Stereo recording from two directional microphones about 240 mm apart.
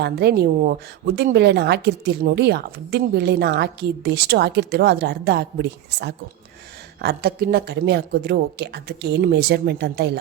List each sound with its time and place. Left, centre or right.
0.0 s a woman's voice: right